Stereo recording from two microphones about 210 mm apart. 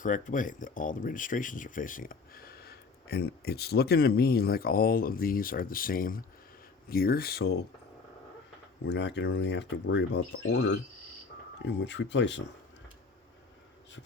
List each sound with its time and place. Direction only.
0.0 s speech: 40° left (ahead or behind)
8.9 s speech: 55° left (ahead or behind)